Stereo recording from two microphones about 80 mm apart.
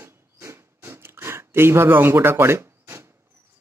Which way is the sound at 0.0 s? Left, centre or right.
Right.